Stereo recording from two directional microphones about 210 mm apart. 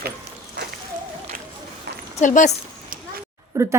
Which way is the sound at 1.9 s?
50° right (ahead or behind).